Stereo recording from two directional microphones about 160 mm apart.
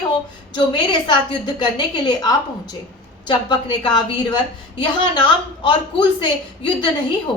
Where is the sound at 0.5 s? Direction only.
30° left (ahead or behind).